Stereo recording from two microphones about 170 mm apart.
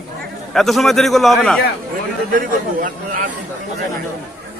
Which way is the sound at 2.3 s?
50° right (ahead or behind).